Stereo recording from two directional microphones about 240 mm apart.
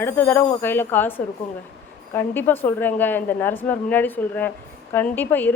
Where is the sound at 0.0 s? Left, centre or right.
Centre.